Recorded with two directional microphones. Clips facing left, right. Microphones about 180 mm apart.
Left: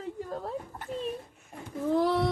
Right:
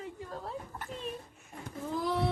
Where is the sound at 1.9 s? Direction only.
70° left (ahead or behind).